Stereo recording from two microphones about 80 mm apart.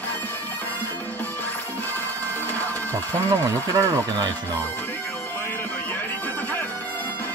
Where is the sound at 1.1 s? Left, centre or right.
Left.